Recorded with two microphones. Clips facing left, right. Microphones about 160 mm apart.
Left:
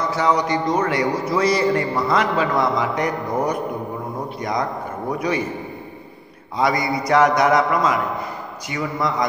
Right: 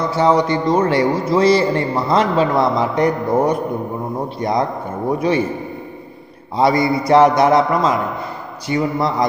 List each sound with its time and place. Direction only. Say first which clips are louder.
0.1 s a man's voice: right 5 dB; 25° right (ahead or behind)
6.5 s a man's voice: right 5 dB; 30° right (ahead or behind)